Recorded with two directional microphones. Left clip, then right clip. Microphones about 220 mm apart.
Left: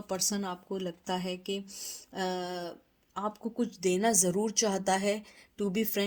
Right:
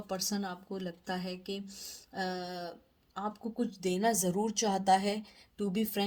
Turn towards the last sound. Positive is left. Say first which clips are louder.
# left 3 dB
turn(degrees=30)  # may be behind; listen again after turning